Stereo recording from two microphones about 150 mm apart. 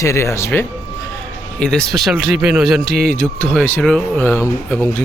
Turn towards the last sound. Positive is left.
turn(degrees=10)  # may be behind; listen again after turning